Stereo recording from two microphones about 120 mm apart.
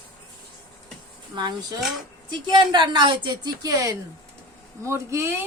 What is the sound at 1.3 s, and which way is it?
A woman's voice, 35° right (ahead or behind).